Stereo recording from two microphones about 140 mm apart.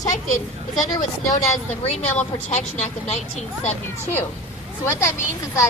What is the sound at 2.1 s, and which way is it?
Speech, 55° left (ahead or behind).